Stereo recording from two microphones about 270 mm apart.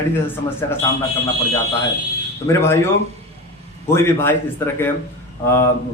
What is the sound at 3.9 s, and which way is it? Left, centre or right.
Speech, centre.